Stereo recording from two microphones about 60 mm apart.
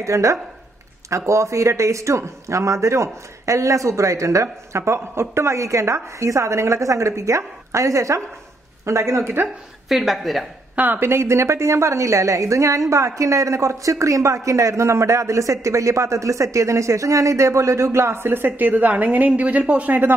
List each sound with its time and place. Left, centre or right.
0.0 s a woman's voice: right
9.8 s a woman's voice: centre
11.0 s a woman's voice: right